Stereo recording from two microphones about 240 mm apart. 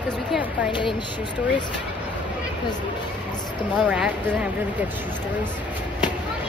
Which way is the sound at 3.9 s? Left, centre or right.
Centre.